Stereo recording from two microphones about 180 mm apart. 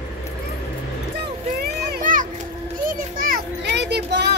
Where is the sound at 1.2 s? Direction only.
60° right (ahead or behind).